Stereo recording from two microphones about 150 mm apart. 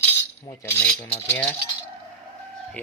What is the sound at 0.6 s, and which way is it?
Speech, 15° left (ahead or behind).